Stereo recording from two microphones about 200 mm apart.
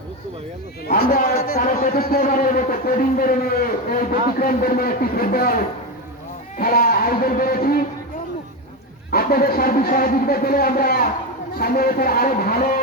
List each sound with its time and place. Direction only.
0.9 s a sound: 50° left (ahead or behind)
1.5 s a man's voice: 45° left (ahead or behind)
9.1 s a man's voice: 50° left (ahead or behind)